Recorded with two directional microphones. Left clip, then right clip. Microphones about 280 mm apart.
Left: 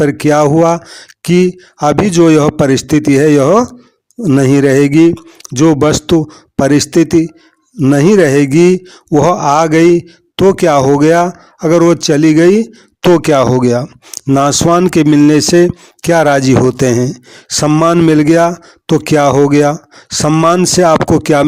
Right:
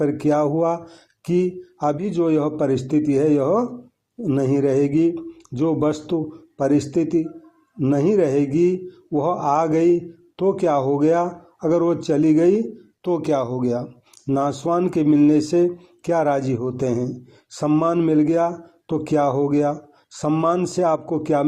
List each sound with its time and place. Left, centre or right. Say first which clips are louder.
0.0 s a man's voice: left 10 dB; left